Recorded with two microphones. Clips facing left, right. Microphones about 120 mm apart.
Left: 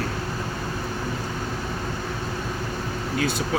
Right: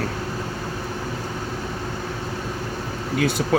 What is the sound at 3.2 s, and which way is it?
Speech, 70° right (ahead or behind).